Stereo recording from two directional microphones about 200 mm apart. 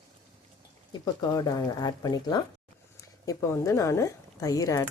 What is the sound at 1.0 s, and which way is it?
Speech, 20° left (ahead or behind).